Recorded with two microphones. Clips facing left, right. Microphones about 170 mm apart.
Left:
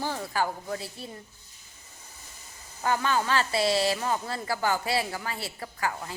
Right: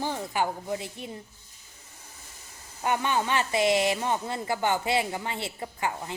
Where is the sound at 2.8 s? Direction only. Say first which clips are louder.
Even; 20° right (ahead or behind).